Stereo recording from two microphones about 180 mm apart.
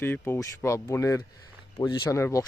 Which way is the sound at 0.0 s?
10° left (ahead or behind).